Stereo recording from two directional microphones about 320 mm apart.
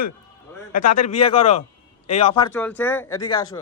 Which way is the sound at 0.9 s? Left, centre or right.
Left.